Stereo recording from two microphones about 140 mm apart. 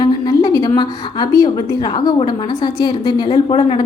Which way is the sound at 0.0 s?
30° left (ahead or behind).